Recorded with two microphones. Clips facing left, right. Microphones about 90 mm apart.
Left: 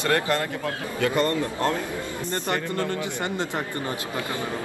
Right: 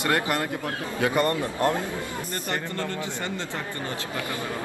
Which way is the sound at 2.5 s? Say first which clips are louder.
Left 3 dB; 20° left (ahead or behind).